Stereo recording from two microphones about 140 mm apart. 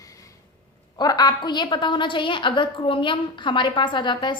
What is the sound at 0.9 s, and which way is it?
A woman's voice, 30° left (ahead or behind).